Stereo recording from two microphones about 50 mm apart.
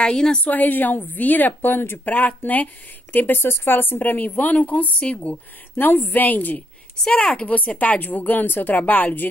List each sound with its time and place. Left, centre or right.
0.0 s a woman's voice: centre
0.4 s speech: left
7.0 s a woman's voice: centre
7.4 s speech: left